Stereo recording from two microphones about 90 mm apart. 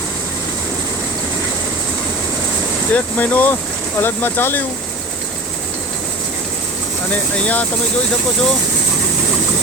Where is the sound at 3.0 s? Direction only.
20° left (ahead or behind).